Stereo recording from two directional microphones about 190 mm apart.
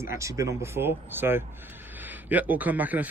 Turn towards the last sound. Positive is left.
turn(degrees=-10)  # may be behind; listen again after turning